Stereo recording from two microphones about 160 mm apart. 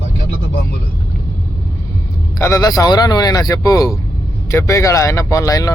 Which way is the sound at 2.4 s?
20° left (ahead or behind).